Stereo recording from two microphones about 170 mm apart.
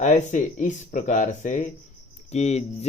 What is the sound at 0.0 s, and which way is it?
Speech, 45° left (ahead or behind).